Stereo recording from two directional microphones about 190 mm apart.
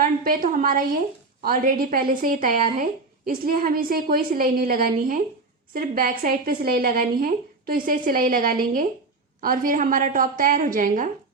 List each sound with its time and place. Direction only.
0.0 s a woman's voice: 50° right (ahead or behind)